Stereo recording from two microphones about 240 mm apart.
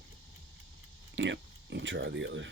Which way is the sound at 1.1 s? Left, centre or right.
Right.